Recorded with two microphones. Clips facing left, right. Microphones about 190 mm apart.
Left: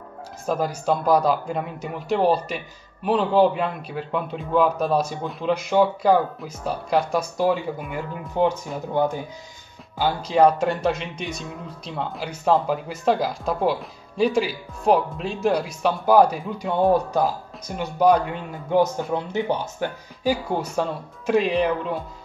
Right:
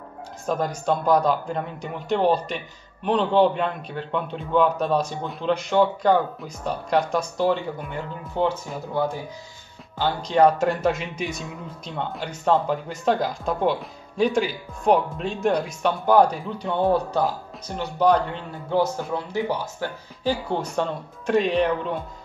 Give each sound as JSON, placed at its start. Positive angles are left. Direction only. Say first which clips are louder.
{"t": 0.5, "sound": "speech", "louder": "left 1 dB", "side_deg": 5}
{"t": 8.4, "sound": "speech", "louder": "left 2 dB", "side_deg": 10}
{"t": 9.9, "sound": "speech", "louder": "left 1 dB", "side_deg": 5}
{"t": 20.6, "sound": "speech", "louder": "left 1 dB", "side_deg": 0}